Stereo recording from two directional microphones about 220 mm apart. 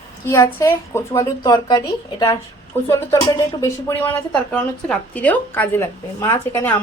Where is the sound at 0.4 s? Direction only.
10° left (ahead or behind).